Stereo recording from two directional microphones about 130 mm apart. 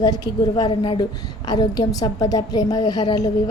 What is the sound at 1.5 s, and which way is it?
A woman's voice, 30° left (ahead or behind).